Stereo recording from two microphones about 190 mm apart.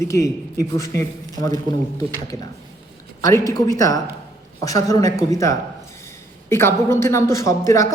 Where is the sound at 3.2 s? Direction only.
20° left (ahead or behind).